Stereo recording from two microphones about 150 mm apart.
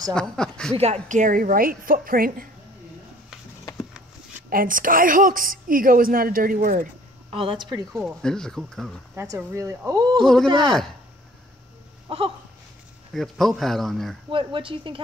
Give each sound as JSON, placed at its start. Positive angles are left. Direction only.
{"t": 0.1, "sound": "speech", "side_deg": 5}
{"t": 0.7, "sound": "a woman's voice", "side_deg": -45}
{"t": 4.5, "sound": "a woman's voice", "side_deg": -70}
{"t": 7.2, "sound": "speech", "side_deg": -35}
{"t": 7.9, "sound": "speech", "side_deg": 0}
{"t": 9.1, "sound": "speech", "side_deg": -15}
{"t": 10.2, "sound": "speech", "side_deg": 5}
{"t": 12.1, "sound": "speech", "side_deg": -40}
{"t": 13.1, "sound": "speech", "side_deg": 0}
{"t": 14.3, "sound": "speech", "side_deg": -35}